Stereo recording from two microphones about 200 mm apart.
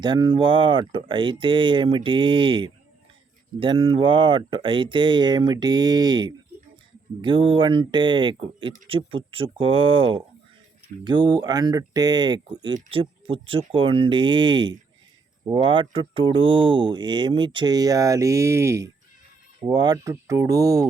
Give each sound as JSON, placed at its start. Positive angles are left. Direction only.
{"t": 0.0, "sound": "speech", "side_deg": -25}